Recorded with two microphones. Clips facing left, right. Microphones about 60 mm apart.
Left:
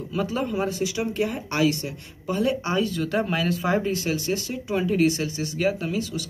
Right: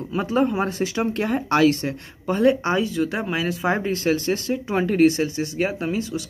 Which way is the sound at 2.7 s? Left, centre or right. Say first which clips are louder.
Right 2 dB; centre.